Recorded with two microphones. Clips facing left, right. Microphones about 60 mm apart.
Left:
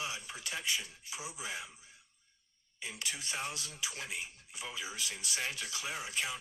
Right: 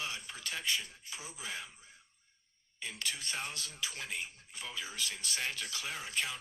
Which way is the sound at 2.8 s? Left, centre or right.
Centre.